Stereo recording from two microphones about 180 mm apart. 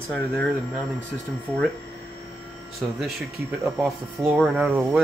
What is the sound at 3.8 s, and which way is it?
Speech, 5° right (ahead or behind).